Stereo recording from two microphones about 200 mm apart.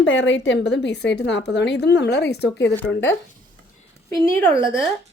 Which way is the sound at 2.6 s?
10° left (ahead or behind).